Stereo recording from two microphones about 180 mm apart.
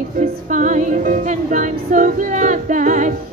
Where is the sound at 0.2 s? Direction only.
45° right (ahead or behind).